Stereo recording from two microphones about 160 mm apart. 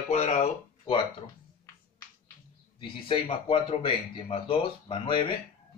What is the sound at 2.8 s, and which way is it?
Speech, 35° left (ahead or behind).